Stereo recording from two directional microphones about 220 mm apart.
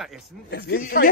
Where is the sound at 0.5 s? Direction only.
45° left (ahead or behind).